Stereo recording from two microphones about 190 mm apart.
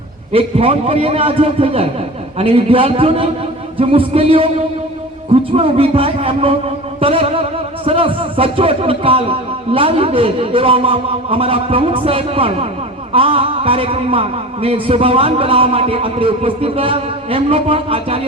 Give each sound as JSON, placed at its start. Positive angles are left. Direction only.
{"t": 0.3, "sound": "a man's voice", "side_deg": -30}